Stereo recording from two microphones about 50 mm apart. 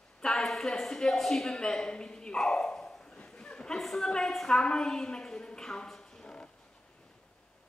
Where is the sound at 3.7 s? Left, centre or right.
Centre.